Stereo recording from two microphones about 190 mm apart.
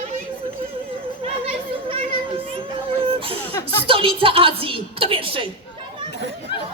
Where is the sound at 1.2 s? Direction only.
30° right (ahead or behind).